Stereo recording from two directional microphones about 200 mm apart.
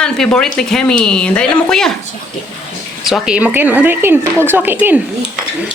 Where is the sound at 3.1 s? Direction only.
5° right (ahead or behind).